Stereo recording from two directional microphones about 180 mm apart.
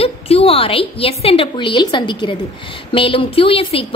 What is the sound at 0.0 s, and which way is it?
A woman's voice, 30° left (ahead or behind).